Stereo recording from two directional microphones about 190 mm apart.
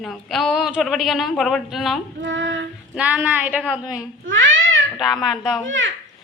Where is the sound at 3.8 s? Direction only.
20° left (ahead or behind).